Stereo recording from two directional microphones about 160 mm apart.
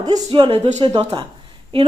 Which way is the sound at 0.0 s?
25° right (ahead or behind).